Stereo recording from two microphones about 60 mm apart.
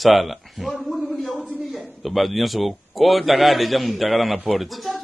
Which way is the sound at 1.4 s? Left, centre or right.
Right.